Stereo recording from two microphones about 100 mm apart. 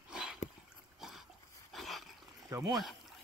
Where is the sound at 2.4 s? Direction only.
35° right (ahead or behind).